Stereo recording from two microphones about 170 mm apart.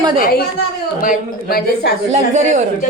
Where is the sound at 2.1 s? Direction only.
45° right (ahead or behind).